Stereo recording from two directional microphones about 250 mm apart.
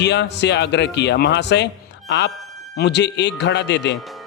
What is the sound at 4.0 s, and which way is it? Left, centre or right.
Speech, centre.